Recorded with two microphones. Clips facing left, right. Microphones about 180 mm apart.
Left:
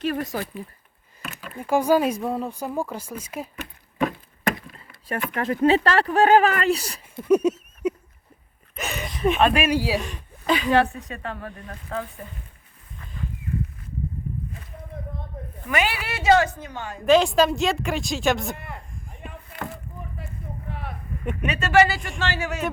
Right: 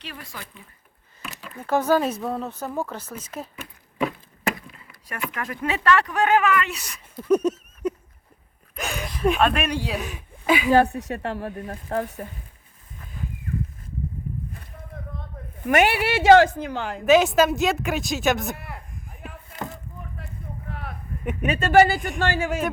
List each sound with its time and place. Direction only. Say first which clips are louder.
0.0 s speech: left 13 dB; 45° left (ahead or behind)
1.5 s speech: left 1 dB; 10° left (ahead or behind)
4.7 s chop: left 8 dB; 30° left (ahead or behind)
5.3 s speech: left 10 dB; 30° left (ahead or behind)
7.3 s a sound: left 1 dB; 10° left (ahead or behind)
8.7 s speech: even; centre (ahead or behind)
11.0 s speech: right 5 dB; 70° right (ahead or behind)
11.6 s speech: right 4 dB; 50° right (ahead or behind)
15.6 s a woman's voice: right 6 dB; 55° right (ahead or behind)
16.3 s a woman's voice: right 4 dB; 90° right
17.1 s speech: even; 5° right (ahead or behind)
19.6 s a sound: left 1 dB; centre (ahead or behind)
21.4 s speech: right 2 dB; 50° right (ahead or behind)